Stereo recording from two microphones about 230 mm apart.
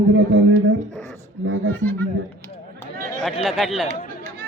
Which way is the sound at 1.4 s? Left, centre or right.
Right.